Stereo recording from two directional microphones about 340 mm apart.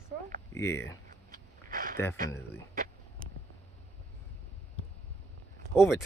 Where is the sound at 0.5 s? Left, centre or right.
Centre.